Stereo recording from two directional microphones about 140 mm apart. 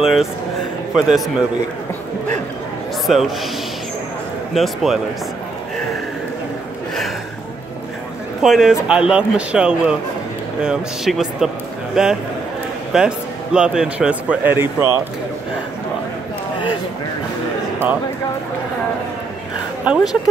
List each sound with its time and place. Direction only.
0.0 s speech: 5° right (ahead or behind)
3.1 s speech: centre (ahead or behind)
4.6 s speech: centre (ahead or behind)
8.4 s a man's voice: centre (ahead or behind)
19.8 s speech: 5° right (ahead or behind)